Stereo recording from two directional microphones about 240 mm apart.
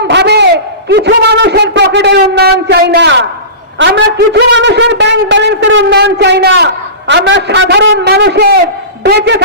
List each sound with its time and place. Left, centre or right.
0.1 s a man's voice: right